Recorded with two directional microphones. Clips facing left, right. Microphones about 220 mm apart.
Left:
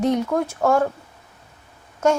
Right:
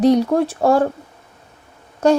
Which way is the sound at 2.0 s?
35° right (ahead or behind).